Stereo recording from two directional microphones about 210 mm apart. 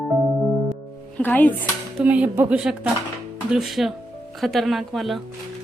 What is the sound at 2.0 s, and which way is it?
A woman's voice, 5° right (ahead or behind).